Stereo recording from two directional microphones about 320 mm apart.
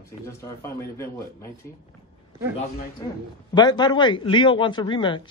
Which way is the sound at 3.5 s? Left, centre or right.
Centre.